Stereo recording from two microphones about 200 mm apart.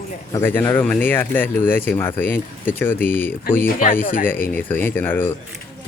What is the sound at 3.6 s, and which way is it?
Speech, 45° left (ahead or behind).